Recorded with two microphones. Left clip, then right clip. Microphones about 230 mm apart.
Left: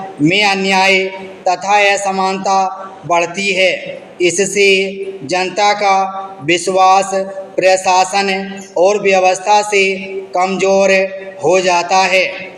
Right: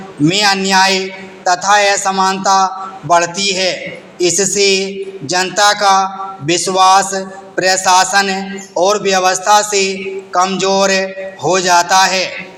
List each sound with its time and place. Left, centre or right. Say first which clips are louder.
0.2 s a man's voice: even; right